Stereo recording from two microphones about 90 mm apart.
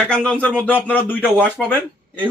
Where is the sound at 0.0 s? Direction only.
15° left (ahead or behind).